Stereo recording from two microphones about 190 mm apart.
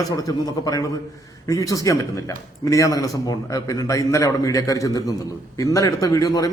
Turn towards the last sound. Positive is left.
turn(degrees=15)  # may be behind; listen again after turning